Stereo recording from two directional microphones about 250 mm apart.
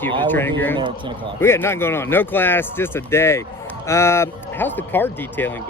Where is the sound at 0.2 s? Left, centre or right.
Centre.